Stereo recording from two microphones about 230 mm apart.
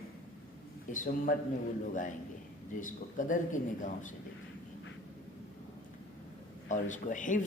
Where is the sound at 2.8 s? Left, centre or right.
Left.